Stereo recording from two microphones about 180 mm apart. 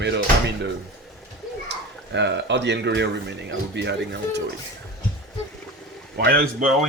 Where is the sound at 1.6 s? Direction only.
75° right (ahead or behind).